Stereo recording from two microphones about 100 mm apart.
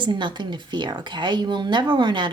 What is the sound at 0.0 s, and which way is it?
Speech, 50° right (ahead or behind).